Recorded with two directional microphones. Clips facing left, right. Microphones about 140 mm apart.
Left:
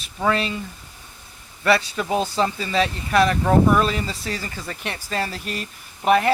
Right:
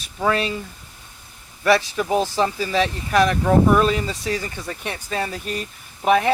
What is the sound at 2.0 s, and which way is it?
Speech, 20° right (ahead or behind).